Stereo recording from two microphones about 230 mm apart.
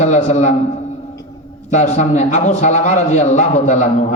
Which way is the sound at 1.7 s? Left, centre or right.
Left.